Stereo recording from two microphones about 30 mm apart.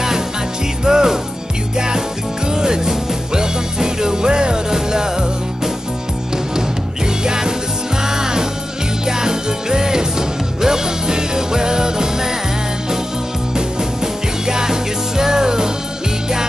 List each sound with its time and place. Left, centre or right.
0.8 s music: centre
2.5 s music: right
7.2 s music: right
14.4 s music: centre